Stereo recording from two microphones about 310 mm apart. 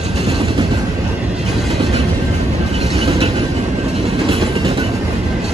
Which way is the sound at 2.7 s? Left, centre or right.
Centre.